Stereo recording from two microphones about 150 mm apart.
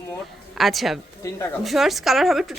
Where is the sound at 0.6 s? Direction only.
Centre (ahead or behind).